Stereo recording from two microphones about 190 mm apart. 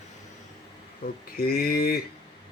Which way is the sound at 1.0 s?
55° left (ahead or behind).